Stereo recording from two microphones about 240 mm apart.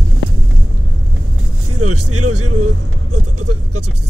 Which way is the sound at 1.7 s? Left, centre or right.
Right.